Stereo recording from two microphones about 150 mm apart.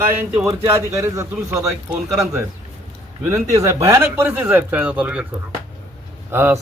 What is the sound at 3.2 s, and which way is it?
Speech, 20° right (ahead or behind).